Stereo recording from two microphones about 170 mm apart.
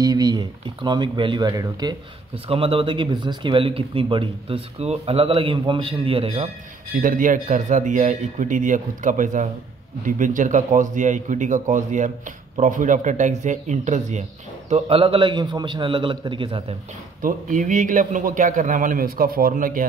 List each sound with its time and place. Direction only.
0.0 s speech: 25° right (ahead or behind)
7.0 s a man's voice: 50° right (ahead or behind); by 16.7 s 30° right (ahead or behind)
17.2 s a man's voice: 50° right (ahead or behind)